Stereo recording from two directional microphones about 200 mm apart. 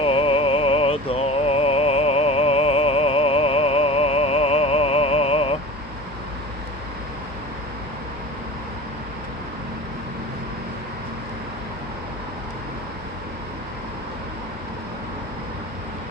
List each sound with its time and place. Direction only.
0.0 s music: 30° left (ahead or behind)